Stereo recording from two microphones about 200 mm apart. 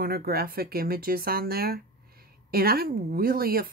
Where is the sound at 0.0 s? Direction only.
50° right (ahead or behind).